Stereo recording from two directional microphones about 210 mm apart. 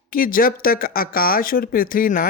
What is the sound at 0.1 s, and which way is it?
A woman's voice, 40° left (ahead or behind).